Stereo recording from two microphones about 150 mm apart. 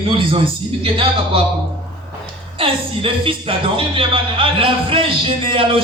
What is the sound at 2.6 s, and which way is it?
Speech, 35° right (ahead or behind).